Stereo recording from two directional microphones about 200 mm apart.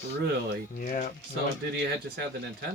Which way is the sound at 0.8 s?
45° left (ahead or behind).